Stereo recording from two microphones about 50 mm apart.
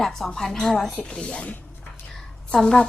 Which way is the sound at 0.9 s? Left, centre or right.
Left.